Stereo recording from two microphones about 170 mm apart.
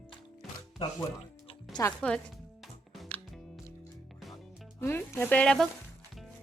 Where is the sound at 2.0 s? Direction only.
5° left (ahead or behind).